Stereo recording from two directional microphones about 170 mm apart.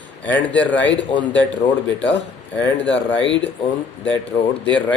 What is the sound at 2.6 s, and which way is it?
Speech, 15° left (ahead or behind).